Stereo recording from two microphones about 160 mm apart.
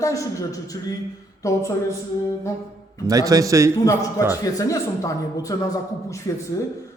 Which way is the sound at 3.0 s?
20° right (ahead or behind).